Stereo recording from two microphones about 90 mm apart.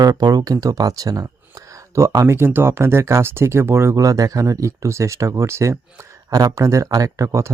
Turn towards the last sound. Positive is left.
turn(degrees=-35)  # may be behind; listen again after turning